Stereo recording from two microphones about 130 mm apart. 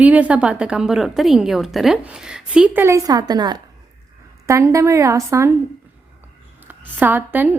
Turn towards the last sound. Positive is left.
turn(degrees=-15)  # may be behind; listen again after turning